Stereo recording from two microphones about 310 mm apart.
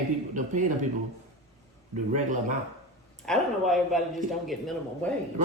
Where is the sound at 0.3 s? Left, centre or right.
Right.